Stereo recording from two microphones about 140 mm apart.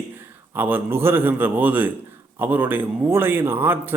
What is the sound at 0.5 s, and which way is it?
Speech, 15° right (ahead or behind).